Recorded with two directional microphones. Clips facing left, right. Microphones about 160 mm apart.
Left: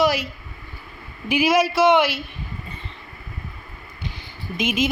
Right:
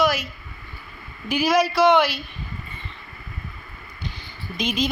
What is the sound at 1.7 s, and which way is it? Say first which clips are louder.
Speech: right 1 dB; 20° left (ahead or behind).